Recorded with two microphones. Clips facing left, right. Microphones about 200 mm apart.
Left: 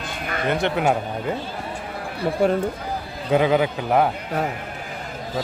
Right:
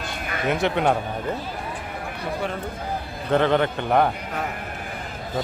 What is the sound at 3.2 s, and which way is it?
Speech, 10° left (ahead or behind).